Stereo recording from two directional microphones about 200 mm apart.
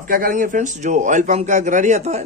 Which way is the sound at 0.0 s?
45° right (ahead or behind).